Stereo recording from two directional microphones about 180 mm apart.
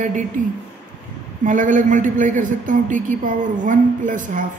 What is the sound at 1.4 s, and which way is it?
A man's voice, 45° right (ahead or behind).